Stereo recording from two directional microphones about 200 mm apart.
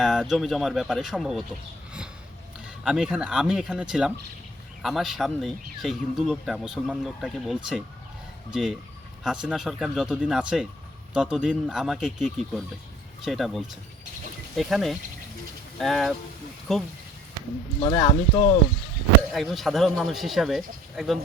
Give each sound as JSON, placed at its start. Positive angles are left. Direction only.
{"t": 0.0, "sound": "speech", "side_deg": 0}
{"t": 2.8, "sound": "speech", "side_deg": -5}
{"t": 9.2, "sound": "speech", "side_deg": -5}
{"t": 17.7, "sound": "speech", "side_deg": 20}
{"t": 19.3, "sound": "speech", "side_deg": 0}